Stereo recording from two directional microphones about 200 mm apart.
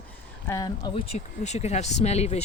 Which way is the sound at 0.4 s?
15° left (ahead or behind).